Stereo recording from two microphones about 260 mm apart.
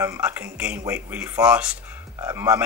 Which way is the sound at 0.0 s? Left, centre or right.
Centre.